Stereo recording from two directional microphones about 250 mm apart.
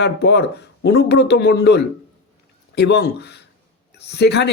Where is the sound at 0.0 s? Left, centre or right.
Left.